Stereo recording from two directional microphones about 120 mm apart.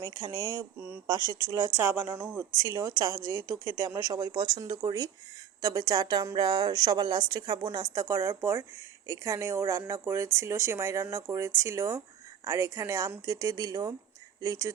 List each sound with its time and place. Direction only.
0.0 s a woman's voice: 30° right (ahead or behind)
1.7 s speech: 15° right (ahead or behind)
2.6 s a woman's voice: 25° right (ahead or behind)